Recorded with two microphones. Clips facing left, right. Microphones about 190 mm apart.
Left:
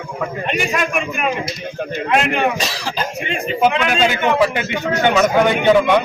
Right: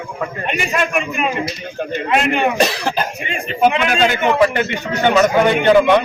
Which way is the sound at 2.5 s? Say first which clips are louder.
Right 6 dB; 60° right (ahead or behind).